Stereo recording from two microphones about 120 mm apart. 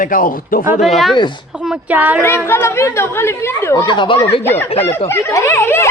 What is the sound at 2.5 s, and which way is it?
Speech, 20° left (ahead or behind).